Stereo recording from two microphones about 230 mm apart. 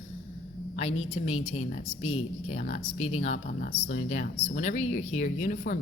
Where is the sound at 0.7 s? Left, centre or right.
Left.